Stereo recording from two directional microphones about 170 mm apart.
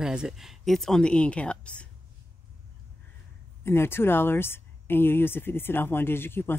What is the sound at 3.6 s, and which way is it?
Speech, 15° left (ahead or behind).